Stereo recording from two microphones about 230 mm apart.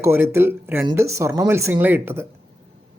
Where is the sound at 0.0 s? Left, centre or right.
Centre.